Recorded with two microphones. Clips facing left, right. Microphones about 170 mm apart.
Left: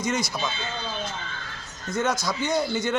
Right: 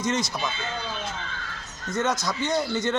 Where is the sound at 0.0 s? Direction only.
25° right (ahead or behind).